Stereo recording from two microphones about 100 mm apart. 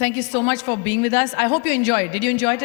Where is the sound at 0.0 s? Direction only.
20° left (ahead or behind).